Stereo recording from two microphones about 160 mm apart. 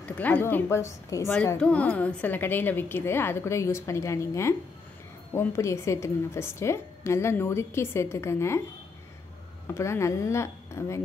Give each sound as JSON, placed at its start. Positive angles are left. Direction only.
{"t": 0.0, "sound": "a woman's voice", "side_deg": 10}
{"t": 9.8, "sound": "a woman's voice", "side_deg": 15}